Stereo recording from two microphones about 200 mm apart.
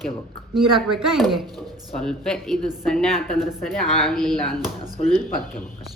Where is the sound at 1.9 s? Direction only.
5° left (ahead or behind).